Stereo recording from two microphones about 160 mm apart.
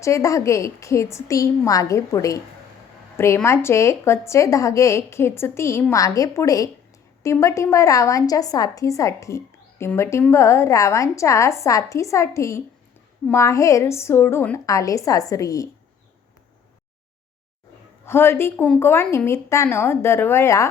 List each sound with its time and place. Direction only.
0.0 s a woman's voice: 20° left (ahead or behind)
18.0 s a woman's voice: 15° left (ahead or behind)